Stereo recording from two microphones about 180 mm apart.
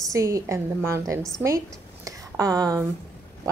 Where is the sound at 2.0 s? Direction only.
20° right (ahead or behind).